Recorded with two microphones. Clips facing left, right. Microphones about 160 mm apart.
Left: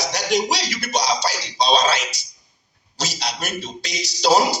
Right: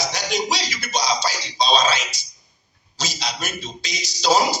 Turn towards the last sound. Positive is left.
turn(degrees=65)  # may be behind; listen again after turning